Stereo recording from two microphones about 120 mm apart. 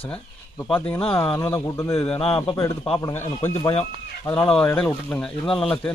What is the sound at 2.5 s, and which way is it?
Speech, 25° left (ahead or behind).